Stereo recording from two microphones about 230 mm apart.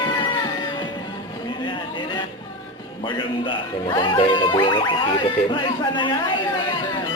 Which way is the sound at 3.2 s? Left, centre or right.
Left.